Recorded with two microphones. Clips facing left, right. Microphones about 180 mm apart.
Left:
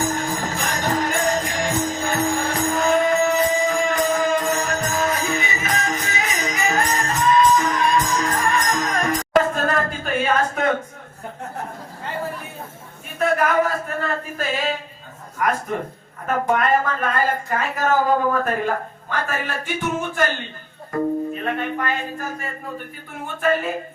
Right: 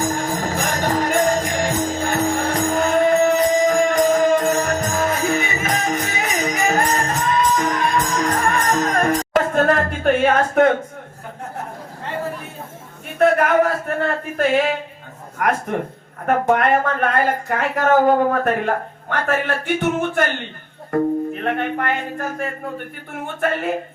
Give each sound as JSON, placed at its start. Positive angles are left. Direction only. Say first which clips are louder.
{"t": 0.4, "sound": "music", "louder": "right 3 dB", "side_deg": -50}
{"t": 13.1, "sound": "music", "louder": "right 4 dB", "side_deg": -60}
{"t": 16.2, "sound": "speech", "louder": "right 4 dB", "side_deg": -60}